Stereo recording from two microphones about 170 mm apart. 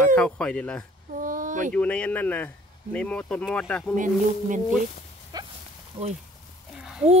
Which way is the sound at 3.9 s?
50° right (ahead or behind).